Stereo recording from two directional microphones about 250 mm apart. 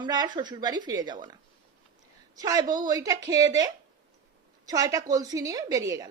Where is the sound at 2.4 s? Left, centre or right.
Centre.